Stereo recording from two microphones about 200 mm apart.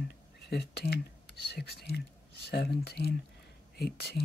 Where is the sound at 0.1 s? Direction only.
55° left (ahead or behind).